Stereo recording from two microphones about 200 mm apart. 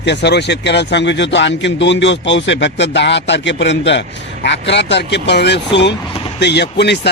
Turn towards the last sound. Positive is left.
turn(degrees=55)  # may be behind; listen again after turning